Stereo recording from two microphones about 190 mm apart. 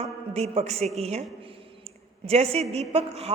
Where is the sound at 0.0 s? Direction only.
35° right (ahead or behind).